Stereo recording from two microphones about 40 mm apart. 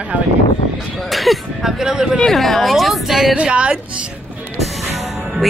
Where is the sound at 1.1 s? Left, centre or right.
Centre.